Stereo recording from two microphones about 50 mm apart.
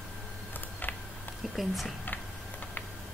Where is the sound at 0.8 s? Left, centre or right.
Left.